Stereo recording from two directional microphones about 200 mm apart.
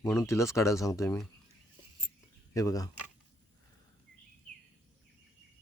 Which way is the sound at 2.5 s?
15° left (ahead or behind).